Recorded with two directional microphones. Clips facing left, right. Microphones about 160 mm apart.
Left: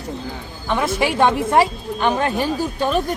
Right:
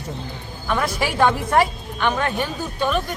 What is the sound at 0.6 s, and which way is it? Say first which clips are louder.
A woman's voice: left 3 dB; 20° left (ahead or behind).